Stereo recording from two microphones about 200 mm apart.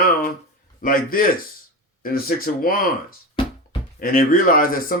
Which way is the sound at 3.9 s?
45° left (ahead or behind).